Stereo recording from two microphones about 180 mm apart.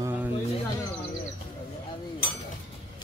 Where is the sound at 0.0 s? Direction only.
10° right (ahead or behind).